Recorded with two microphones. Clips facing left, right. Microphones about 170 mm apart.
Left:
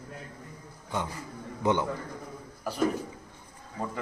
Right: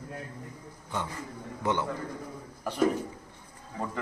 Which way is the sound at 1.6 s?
15° left (ahead or behind).